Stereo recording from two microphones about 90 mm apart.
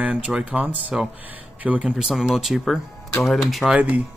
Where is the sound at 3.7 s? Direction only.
15° right (ahead or behind).